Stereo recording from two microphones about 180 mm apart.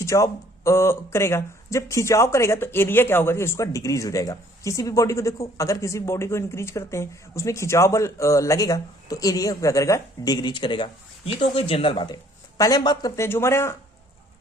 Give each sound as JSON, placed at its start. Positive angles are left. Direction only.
{"t": 0.0, "sound": "speech", "side_deg": 15}